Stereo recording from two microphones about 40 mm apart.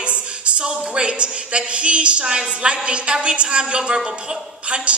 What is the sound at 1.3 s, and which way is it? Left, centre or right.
A woman's voice, right.